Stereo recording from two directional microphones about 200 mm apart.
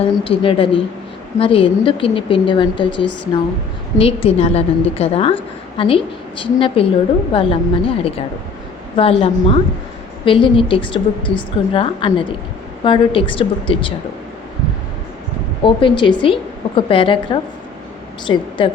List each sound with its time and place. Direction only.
0.3 s a woman's voice: 25° left (ahead or behind)
15.6 s a woman's voice: 25° left (ahead or behind)